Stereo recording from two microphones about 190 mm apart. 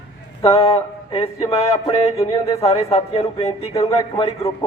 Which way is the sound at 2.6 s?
35° left (ahead or behind).